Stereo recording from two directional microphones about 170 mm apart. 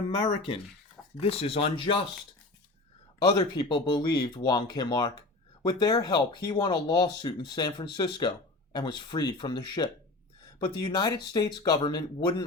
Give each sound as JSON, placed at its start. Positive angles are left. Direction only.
{"t": 1.2, "sound": "speech", "side_deg": 35}
{"t": 3.2, "sound": "speech", "side_deg": 25}